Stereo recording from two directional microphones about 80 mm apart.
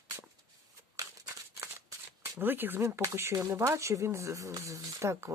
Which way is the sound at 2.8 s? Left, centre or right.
Right.